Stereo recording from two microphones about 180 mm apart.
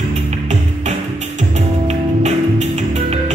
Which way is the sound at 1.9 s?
40° right (ahead or behind).